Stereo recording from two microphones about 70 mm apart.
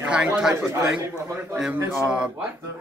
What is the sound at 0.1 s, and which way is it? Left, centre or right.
Speech, centre.